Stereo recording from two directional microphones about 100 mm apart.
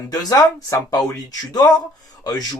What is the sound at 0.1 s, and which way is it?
Speech, 40° left (ahead or behind).